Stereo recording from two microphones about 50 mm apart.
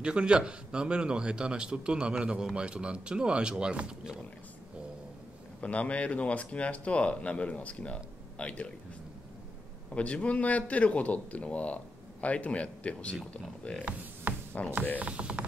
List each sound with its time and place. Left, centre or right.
0.0 s a man's voice: centre
5.6 s a man's voice: left
9.9 s a man's voice: left
15.0 s a man's voice: right